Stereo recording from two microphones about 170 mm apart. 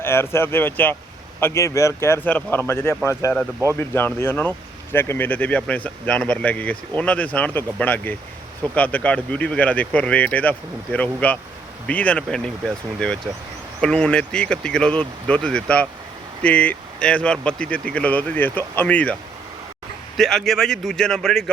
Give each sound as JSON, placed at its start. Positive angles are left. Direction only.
{"t": 0.0, "sound": "speech", "side_deg": 15}
{"t": 20.1, "sound": "speech", "side_deg": 0}